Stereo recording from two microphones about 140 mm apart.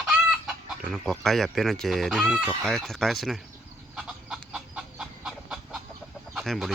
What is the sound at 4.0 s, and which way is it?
Chicken, 5° right (ahead or behind).